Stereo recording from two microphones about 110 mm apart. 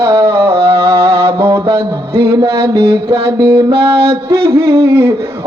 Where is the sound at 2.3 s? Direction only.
30° right (ahead or behind).